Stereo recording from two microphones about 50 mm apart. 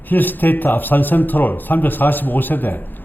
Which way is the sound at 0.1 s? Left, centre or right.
Left.